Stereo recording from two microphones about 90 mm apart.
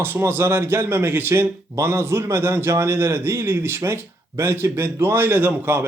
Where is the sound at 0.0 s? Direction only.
25° right (ahead or behind).